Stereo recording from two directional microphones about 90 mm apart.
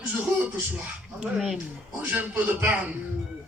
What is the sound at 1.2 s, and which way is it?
Speech, 5° right (ahead or behind).